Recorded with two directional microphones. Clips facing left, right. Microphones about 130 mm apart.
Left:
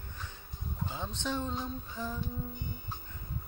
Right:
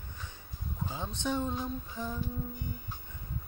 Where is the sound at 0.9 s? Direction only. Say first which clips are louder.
Right 2 dB; 15° right (ahead or behind).